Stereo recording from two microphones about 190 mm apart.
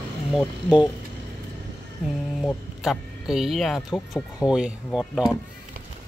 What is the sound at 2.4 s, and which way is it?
Speech, centre (ahead or behind).